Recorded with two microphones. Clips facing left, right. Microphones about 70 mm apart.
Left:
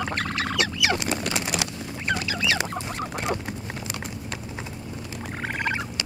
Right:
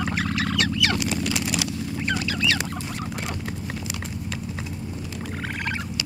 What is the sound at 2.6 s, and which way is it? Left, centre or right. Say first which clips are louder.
Goose: even; left.